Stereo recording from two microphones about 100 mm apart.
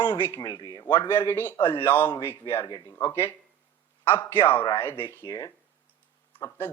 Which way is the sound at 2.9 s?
30° left (ahead or behind).